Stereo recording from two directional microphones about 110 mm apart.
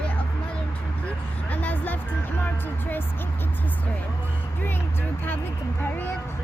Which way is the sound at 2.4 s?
20° left (ahead or behind).